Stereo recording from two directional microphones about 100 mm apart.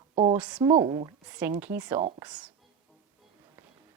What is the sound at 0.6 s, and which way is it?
Speech, 50° right (ahead or behind).